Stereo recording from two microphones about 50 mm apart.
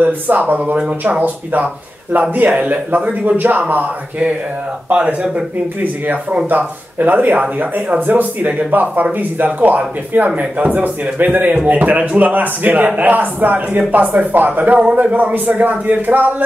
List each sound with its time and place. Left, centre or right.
0.0 s speech: right
4.8 s speech: right
6.5 s speech: right